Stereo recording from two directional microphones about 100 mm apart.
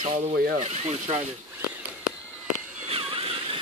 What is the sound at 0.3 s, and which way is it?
Speech, 90° right.